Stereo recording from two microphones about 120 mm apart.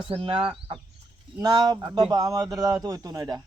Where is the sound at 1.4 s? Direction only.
35° right (ahead or behind).